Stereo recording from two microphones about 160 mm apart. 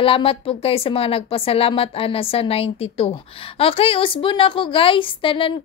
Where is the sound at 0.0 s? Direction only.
35° left (ahead or behind).